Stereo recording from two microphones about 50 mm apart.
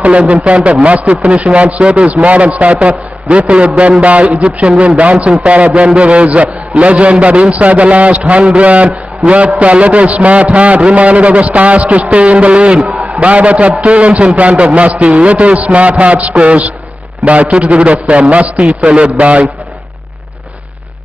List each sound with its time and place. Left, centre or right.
0.0 s a man's voice: right